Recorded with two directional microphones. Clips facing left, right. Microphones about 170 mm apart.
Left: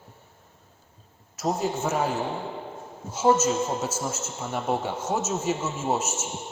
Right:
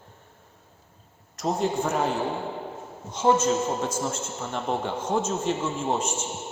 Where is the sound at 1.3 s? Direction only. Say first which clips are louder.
Right 1 dB; 5° left (ahead or behind).